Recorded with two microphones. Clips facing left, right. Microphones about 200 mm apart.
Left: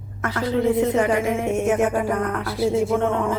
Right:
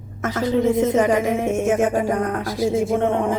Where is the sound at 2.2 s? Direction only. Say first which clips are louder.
Right 2 dB; 35° right (ahead or behind).